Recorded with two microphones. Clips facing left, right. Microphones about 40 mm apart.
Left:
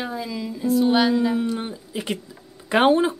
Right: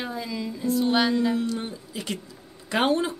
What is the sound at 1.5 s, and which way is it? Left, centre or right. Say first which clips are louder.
Speech: left 3 dB; left.